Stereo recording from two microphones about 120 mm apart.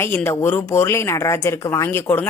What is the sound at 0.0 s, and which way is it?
A woman's voice, 20° left (ahead or behind).